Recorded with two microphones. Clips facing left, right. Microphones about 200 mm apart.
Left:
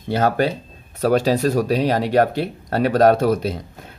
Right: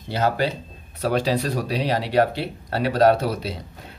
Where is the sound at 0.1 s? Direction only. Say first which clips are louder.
Left 4 dB; 50° left (ahead or behind).